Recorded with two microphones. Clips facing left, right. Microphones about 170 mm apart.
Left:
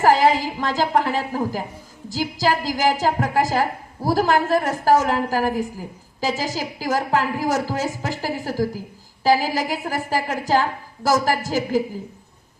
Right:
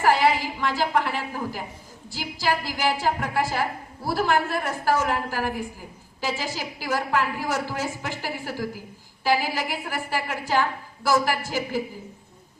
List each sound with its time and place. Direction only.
0.0 s a woman's voice: 40° left (ahead or behind)